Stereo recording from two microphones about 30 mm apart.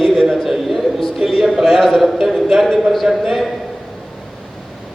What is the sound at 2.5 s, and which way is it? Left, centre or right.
Speech, centre.